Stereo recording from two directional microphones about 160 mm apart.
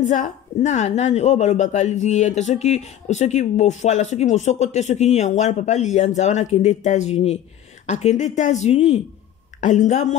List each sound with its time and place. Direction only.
0.1 s a woman's voice: 50° left (ahead or behind)